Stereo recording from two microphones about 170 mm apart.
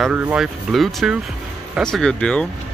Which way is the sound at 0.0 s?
10° right (ahead or behind).